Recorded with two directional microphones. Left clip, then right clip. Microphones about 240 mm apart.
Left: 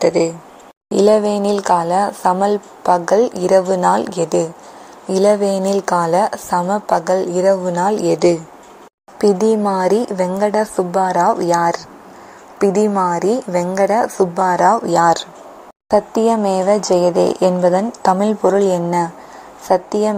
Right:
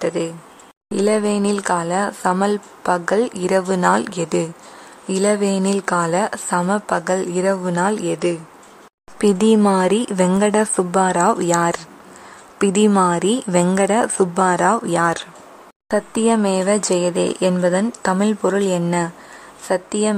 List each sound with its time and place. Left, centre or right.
0.0 s a woman's voice: centre
9.2 s speech: right
13.8 s a woman's voice: centre
14.1 s speech: right
15.9 s a woman's voice: centre